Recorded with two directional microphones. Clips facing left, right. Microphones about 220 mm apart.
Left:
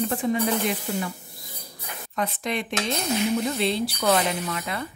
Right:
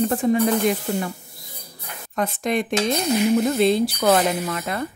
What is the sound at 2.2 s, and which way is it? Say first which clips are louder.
Speech: right 5 dB; 45° right (ahead or behind).